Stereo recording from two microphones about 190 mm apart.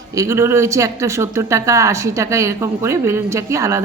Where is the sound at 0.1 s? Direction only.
15° right (ahead or behind).